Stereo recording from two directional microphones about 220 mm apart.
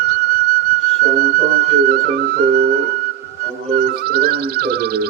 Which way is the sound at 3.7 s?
45° right (ahead or behind).